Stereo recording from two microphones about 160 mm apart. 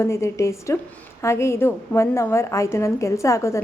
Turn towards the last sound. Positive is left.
turn(degrees=20)  # may be behind; listen again after turning